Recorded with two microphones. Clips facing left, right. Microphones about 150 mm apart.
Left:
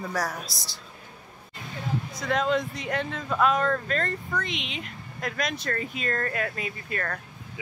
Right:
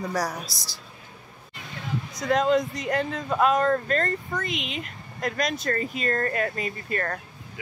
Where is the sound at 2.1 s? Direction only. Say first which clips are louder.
Right 4 dB; centre (ahead or behind).